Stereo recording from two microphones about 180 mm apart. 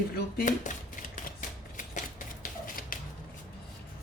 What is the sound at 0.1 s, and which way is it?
Speech, 55° left (ahead or behind).